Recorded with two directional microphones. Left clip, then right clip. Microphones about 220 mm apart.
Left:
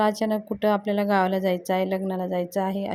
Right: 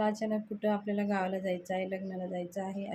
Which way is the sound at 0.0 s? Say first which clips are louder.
Left 9 dB; 40° left (ahead or behind).